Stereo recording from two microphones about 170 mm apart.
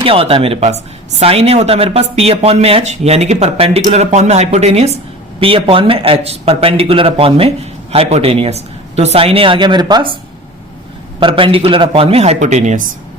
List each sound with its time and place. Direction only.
0.0 s speech: 30° right (ahead or behind)
11.2 s speech: 30° right (ahead or behind); by 12.9 s 45° right (ahead or behind)